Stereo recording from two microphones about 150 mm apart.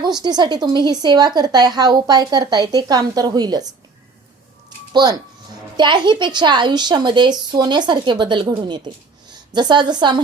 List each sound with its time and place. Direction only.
0.0 s speech: 30° right (ahead or behind)
5.0 s a woman's voice: 30° right (ahead or behind)